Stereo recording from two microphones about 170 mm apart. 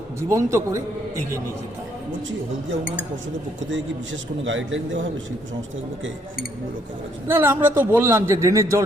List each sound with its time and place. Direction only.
0.2 s a man's voice: 15° right (ahead or behind)
3.7 s a man's voice: 90° right
7.3 s a man's voice: 15° right (ahead or behind)